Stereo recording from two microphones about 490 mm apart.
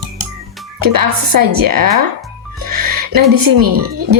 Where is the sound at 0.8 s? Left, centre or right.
Right.